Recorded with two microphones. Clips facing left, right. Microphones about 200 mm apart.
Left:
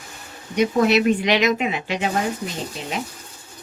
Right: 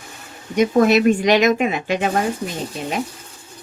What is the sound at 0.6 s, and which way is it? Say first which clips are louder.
Speech: right 3 dB; 45° right (ahead or behind).